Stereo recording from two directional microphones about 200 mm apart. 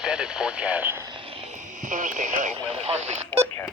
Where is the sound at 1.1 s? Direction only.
25° right (ahead or behind).